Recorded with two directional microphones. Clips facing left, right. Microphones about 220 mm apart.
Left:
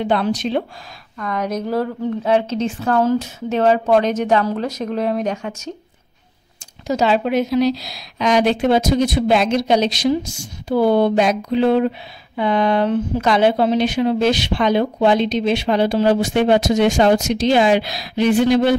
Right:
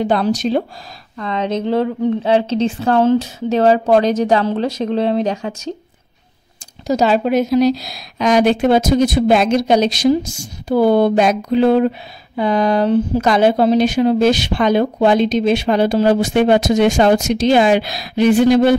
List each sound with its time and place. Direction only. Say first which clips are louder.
0.0 s a woman's voice: right 3 dB; 40° right (ahead or behind)
1.1 s a woman's voice: right 3 dB; 25° right (ahead or behind)
6.9 s speech: right 3 dB; 40° right (ahead or behind)